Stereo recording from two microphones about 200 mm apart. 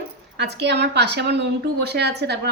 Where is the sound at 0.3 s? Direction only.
55° right (ahead or behind).